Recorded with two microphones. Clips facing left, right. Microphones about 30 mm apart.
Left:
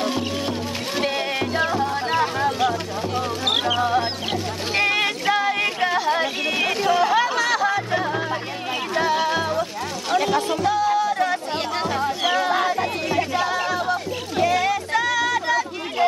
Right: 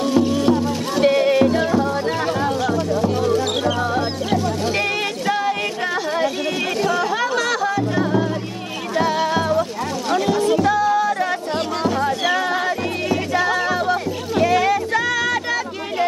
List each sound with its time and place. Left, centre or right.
0.0 s music: centre
10.5 s music: centre
12.3 s music: centre